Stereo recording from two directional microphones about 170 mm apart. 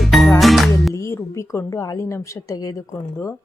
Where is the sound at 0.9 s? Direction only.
15° left (ahead or behind).